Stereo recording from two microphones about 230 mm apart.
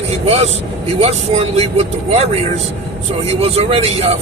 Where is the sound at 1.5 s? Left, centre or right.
Right.